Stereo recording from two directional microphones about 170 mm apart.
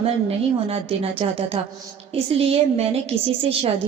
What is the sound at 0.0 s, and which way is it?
A woman's voice, 35° right (ahead or behind).